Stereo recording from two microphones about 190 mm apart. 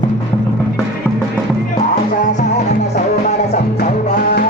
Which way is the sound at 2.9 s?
35° left (ahead or behind).